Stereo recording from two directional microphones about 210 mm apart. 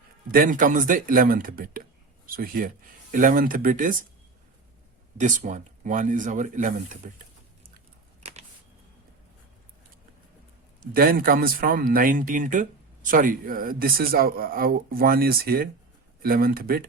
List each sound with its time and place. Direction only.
0.3 s speech: 45° right (ahead or behind)
5.1 s speech: 35° right (ahead or behind)
8.2 s a sound: 30° right (ahead or behind)
10.8 s speech: 45° right (ahead or behind)